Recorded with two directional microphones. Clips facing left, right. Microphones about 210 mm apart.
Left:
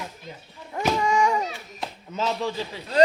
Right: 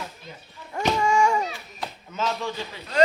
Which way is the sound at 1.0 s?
20° left (ahead or behind).